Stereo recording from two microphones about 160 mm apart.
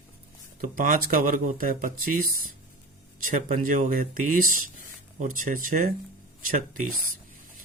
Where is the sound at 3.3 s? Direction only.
55° right (ahead or behind).